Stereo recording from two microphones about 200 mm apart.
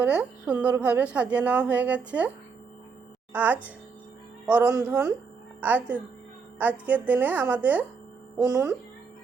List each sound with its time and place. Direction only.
0.0 s a woman's voice: 5° right (ahead or behind)
3.3 s a woman's voice: 10° right (ahead or behind)